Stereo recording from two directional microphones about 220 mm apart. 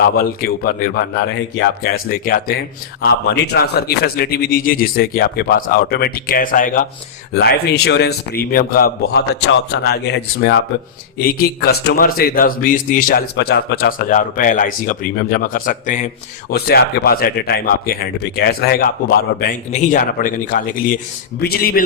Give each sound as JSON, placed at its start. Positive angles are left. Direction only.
{"t": 0.0, "sound": "speech", "side_deg": 40}